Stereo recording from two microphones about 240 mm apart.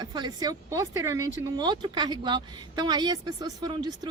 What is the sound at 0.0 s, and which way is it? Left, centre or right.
Speech, centre.